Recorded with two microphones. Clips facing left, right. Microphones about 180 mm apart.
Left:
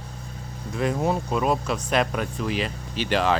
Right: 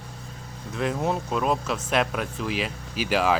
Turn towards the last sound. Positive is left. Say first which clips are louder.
# even
turn(degrees=-5)  # may be behind; listen again after turning